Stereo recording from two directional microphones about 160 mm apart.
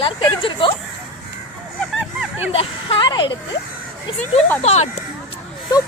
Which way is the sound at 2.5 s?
35° left (ahead or behind).